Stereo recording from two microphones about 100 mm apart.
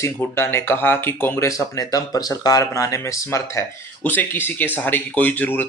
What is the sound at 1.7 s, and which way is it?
Speech, 40° left (ahead or behind).